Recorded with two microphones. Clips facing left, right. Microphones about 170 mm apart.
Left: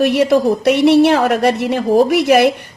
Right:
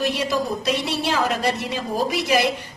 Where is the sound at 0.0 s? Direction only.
60° left (ahead or behind).